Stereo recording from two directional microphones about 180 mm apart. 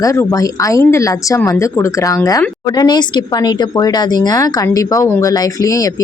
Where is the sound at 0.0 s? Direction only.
20° left (ahead or behind).